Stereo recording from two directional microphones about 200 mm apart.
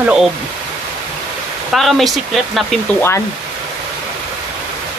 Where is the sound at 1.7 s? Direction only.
Centre (ahead or behind).